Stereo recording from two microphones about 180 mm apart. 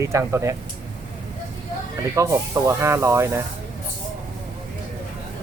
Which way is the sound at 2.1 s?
15° right (ahead or behind).